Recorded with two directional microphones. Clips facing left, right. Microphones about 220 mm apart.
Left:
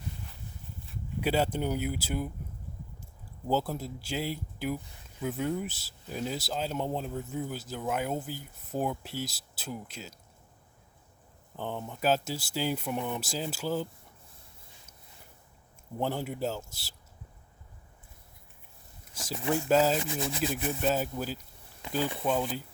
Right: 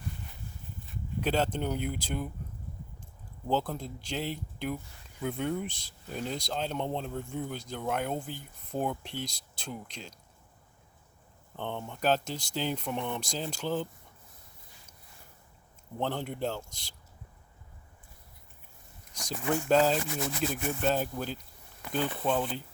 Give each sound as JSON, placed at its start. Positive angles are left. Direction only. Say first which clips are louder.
{"t": 0.9, "sound": "speech", "louder": "left 1 dB", "side_deg": 10}
{"t": 11.5, "sound": "speech", "louder": "left 1 dB", "side_deg": 5}
{"t": 16.0, "sound": "speech", "louder": "left 1 dB", "side_deg": 10}
{"t": 19.1, "sound": "speech", "louder": "left 1 dB", "side_deg": 5}
{"t": 20.1, "sound": "speech", "louder": "left 1 dB", "side_deg": 20}
{"t": 20.8, "sound": "speech", "louder": "even", "side_deg": 5}